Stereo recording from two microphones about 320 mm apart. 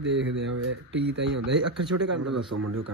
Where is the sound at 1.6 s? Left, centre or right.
Right.